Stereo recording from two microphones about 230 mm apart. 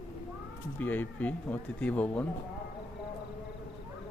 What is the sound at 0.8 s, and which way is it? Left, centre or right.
Speech, centre.